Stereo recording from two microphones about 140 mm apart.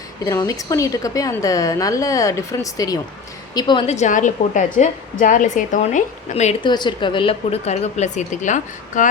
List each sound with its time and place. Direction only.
0.3 s a woman's voice: 25° left (ahead or behind)
3.8 s a woman's voice: 55° left (ahead or behind)
6.6 s a woman's voice: 35° left (ahead or behind); by 9.0 s 60° left (ahead or behind)